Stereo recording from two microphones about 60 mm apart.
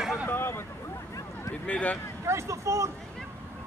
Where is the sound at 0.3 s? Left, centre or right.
Left.